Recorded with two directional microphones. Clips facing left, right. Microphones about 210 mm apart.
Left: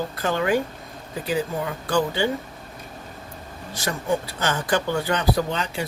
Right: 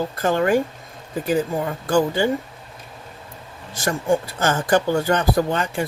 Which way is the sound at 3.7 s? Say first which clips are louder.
Right 4 dB; 50° right (ahead or behind).